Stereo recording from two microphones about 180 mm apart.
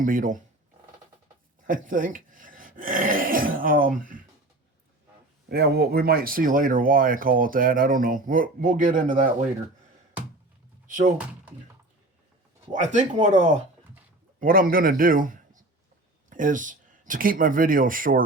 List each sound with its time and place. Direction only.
0.0 s speech: 50° right (ahead or behind)
1.6 s speech: 50° right (ahead or behind)
5.5 s speech: 60° right (ahead or behind)
10.8 s a sound: 45° right (ahead or behind)
12.7 s a man's voice: 40° right (ahead or behind)